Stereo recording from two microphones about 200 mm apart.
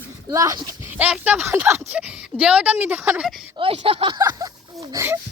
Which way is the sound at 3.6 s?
30° right (ahead or behind).